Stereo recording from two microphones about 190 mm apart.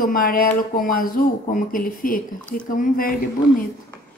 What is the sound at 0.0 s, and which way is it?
Speech, 50° left (ahead or behind).